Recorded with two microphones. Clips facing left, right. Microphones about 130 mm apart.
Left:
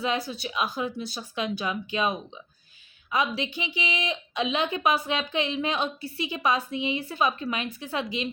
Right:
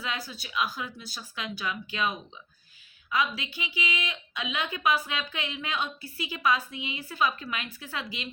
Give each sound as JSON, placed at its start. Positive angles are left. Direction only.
{"t": 0.0, "sound": "speech", "side_deg": 25}